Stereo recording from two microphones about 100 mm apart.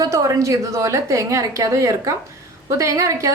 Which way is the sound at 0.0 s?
35° right (ahead or behind).